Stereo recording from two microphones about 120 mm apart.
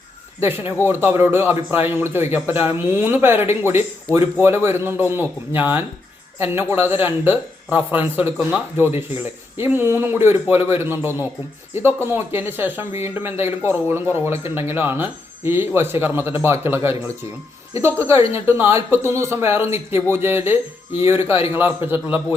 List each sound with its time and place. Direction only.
0.3 s a man's voice: 20° right (ahead or behind)
18.0 s a man's voice: 25° right (ahead or behind)